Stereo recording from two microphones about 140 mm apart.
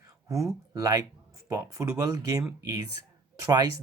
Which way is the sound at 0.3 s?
25° right (ahead or behind).